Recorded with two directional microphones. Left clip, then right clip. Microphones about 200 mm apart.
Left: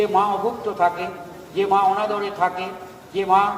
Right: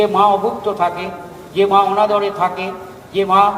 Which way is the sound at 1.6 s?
30° right (ahead or behind).